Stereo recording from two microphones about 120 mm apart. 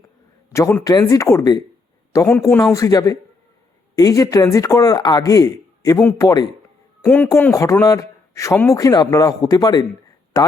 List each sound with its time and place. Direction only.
0.5 s a man's voice: 25° left (ahead or behind)
2.2 s a man's voice: 20° left (ahead or behind)
7.0 s a man's voice: 15° left (ahead or behind); by 10.5 s 30° left (ahead or behind)